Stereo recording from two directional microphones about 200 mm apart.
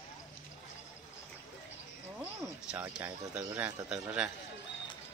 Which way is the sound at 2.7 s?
5° right (ahead or behind).